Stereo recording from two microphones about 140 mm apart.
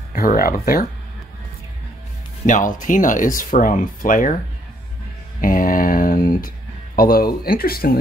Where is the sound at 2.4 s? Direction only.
65° left (ahead or behind).